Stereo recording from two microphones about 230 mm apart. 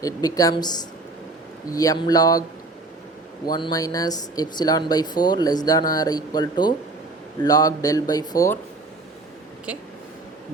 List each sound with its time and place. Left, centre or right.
0.0 s speech: centre
3.4 s speech: centre
9.7 s speech: centre